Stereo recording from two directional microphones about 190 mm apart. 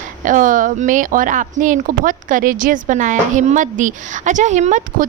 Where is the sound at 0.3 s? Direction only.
45° right (ahead or behind).